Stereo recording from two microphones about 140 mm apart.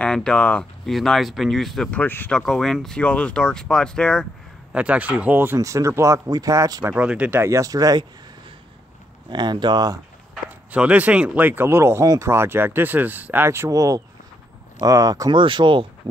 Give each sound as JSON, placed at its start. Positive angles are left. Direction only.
{"t": 0.0, "sound": "speech", "side_deg": 5}
{"t": 4.7, "sound": "speech", "side_deg": -10}
{"t": 9.3, "sound": "speech", "side_deg": -35}
{"t": 10.3, "sound": "speech", "side_deg": -10}